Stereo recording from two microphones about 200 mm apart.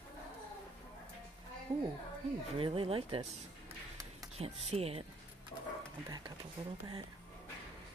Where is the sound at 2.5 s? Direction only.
25° right (ahead or behind).